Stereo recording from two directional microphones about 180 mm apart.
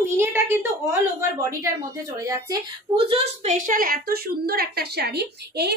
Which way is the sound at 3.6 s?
50° right (ahead or behind).